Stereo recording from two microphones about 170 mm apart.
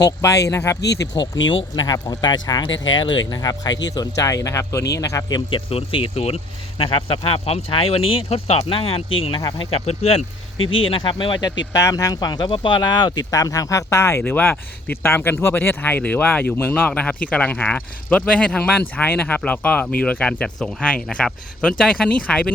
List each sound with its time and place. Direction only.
0.0 s speech: 15° left (ahead or behind)
0.8 s speech: 80° left
1.7 s speech: 20° left (ahead or behind)
2.6 s speech: 90° left
2.9 s speech: 25° left (ahead or behind)
5.5 s speech: 30° left (ahead or behind)
9.4 s speech: 20° left (ahead or behind)
9.7 s speech: 35° left (ahead or behind); by 22.5 s 5° left (ahead or behind)